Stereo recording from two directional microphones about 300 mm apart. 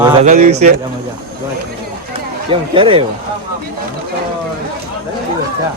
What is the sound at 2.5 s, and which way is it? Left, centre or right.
Speech, centre.